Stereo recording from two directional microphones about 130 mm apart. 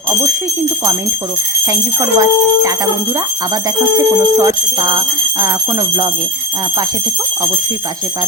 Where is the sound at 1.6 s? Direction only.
25° right (ahead or behind).